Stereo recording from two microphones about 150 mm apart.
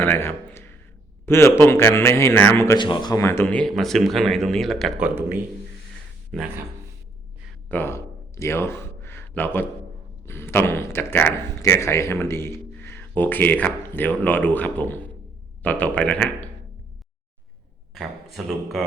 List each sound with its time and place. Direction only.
0.0 s a man's voice: 15° left (ahead or behind)
2.7 s speech: 30° left (ahead or behind)
3.2 s speech: 15° left (ahead or behind)
4.9 s a man's voice: 10° right (ahead or behind)
6.3 s speech: 5° left (ahead or behind)
7.7 s a man's voice: 15° left (ahead or behind)
17.9 s speech: centre (ahead or behind)